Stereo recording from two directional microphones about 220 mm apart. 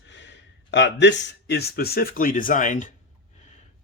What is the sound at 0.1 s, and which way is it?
Speech, 55° left (ahead or behind).